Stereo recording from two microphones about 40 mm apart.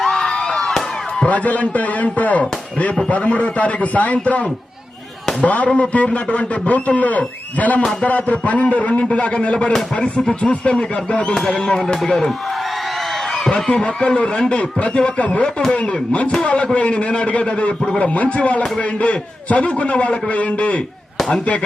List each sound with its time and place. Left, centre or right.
0.0 s a sound: centre
1.2 s a man's voice: left
10.0 s speech: centre
10.4 s speech: left
11.3 s speech: centre
13.7 s a man's voice: left
21.2 s chop: centre